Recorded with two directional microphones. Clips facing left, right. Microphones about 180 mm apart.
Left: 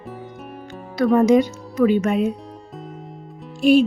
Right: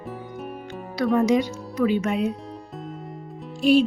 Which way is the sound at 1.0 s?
50° left (ahead or behind).